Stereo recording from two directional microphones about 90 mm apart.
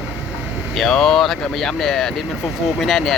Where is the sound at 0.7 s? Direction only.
Centre (ahead or behind).